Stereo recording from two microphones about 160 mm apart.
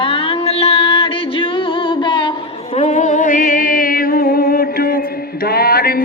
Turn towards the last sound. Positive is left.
turn(degrees=70)  # may be behind; listen again after turning